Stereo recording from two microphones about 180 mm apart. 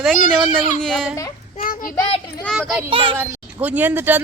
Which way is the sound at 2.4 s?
Centre (ahead or behind).